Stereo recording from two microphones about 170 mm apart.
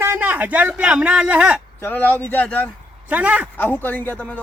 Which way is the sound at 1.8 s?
10° left (ahead or behind).